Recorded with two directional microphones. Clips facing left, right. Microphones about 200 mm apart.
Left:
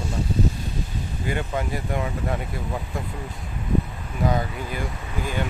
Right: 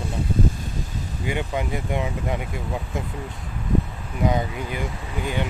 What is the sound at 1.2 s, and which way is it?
Speech, 15° right (ahead or behind).